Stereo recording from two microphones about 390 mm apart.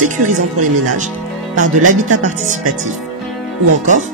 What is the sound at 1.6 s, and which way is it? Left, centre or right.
Speech, centre.